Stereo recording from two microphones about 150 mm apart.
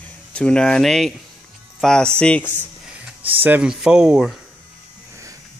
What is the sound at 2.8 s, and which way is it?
Music, 10° right (ahead or behind).